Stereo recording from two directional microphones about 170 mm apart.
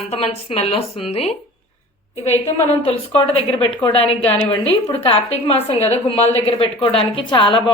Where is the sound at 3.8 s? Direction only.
35° left (ahead or behind).